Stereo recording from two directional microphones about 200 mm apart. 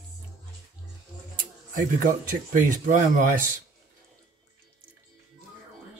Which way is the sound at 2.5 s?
40° right (ahead or behind).